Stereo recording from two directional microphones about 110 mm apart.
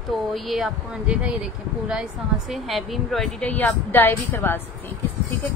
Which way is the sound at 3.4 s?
15° left (ahead or behind).